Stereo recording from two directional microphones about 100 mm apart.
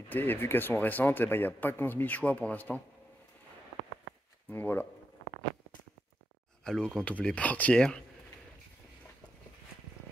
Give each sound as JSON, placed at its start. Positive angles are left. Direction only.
{"t": 0.1, "sound": "speech", "side_deg": 20}
{"t": 4.5, "sound": "speech", "side_deg": 20}
{"t": 6.6, "sound": "speech", "side_deg": 5}